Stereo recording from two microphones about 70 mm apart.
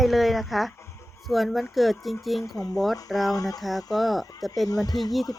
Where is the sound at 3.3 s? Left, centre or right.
Left.